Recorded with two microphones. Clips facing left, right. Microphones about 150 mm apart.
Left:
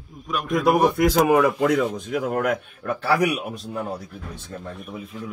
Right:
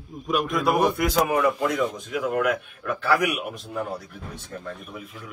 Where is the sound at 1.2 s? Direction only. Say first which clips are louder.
Left 5 dB; 90° left.